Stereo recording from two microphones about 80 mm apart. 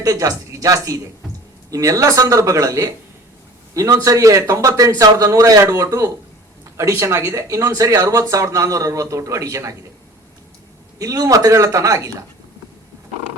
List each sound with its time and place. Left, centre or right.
0.0 s a man's voice: right
10.9 s a man's voice: right